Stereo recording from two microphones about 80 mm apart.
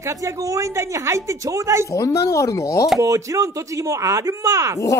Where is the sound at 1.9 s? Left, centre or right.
Left.